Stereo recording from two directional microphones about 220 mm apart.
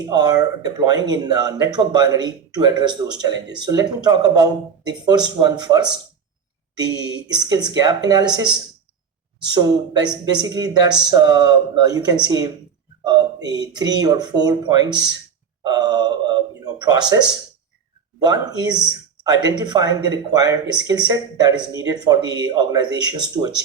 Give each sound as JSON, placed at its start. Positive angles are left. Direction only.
{"t": 0.0, "sound": "speech", "side_deg": -15}
{"t": 15.6, "sound": "gasp", "side_deg": -20}
{"t": 18.2, "sound": "speech", "side_deg": -20}